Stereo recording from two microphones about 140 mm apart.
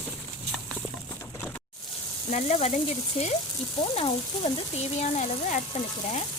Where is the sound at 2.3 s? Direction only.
50° left (ahead or behind).